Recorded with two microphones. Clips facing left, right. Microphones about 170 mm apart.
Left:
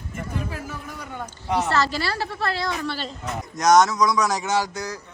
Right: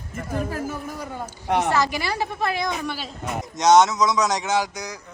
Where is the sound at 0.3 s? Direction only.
45° right (ahead or behind).